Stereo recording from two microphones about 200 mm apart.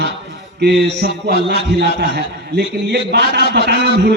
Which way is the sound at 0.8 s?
55° right (ahead or behind).